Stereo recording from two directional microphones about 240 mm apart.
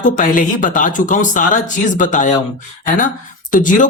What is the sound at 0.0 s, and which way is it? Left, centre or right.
Speech, left.